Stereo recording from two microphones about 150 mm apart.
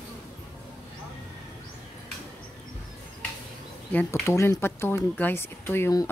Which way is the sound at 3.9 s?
10° left (ahead or behind).